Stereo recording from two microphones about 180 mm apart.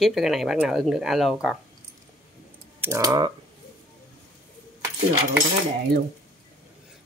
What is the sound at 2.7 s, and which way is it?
Speech, 15° right (ahead or behind).